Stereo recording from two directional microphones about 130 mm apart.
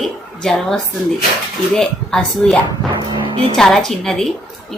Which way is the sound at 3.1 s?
40° right (ahead or behind).